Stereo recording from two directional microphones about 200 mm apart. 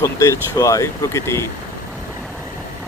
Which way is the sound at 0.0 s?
15° left (ahead or behind).